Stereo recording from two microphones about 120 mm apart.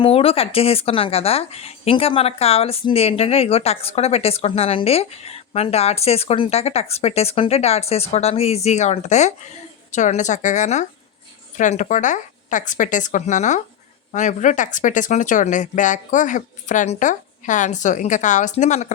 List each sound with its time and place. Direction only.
0.0 s speech: 55° left (ahead or behind); by 9.3 s 75° left (ahead or behind)
9.9 s speech: 90° left